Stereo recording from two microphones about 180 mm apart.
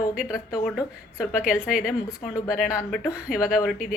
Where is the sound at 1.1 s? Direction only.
5° right (ahead or behind).